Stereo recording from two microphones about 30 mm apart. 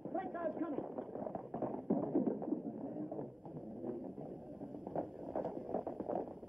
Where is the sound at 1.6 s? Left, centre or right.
Centre.